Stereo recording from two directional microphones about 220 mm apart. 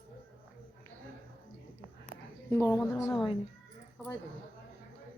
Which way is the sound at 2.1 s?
50° right (ahead or behind).